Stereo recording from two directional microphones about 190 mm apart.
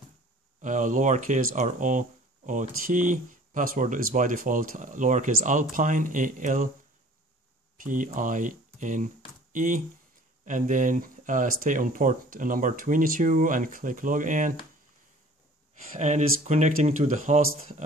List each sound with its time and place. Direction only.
0.6 s speech: 40° right (ahead or behind)
7.8 s speech: 45° right (ahead or behind)
16.0 s speech: 40° right (ahead or behind)